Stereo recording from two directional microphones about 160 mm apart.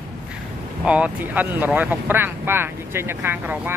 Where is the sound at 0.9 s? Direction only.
10° right (ahead or behind).